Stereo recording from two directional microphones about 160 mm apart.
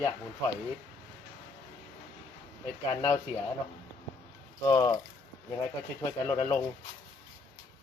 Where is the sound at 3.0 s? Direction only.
15° left (ahead or behind).